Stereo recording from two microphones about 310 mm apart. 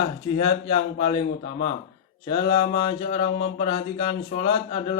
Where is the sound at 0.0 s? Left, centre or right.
Centre.